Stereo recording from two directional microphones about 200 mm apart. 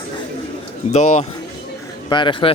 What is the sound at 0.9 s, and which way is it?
Speech, 35° left (ahead or behind).